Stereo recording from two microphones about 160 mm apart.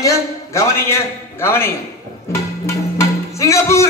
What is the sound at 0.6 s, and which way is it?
Speech, 15° left (ahead or behind).